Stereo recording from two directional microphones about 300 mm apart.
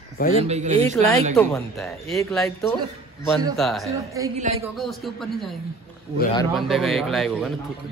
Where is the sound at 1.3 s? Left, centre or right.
Centre.